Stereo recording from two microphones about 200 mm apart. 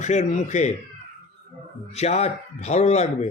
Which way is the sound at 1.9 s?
35° left (ahead or behind).